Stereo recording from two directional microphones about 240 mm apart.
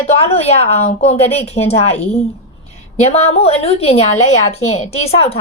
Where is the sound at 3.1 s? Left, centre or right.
Left.